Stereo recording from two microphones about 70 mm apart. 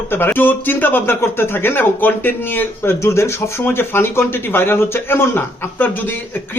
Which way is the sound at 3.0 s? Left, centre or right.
Left.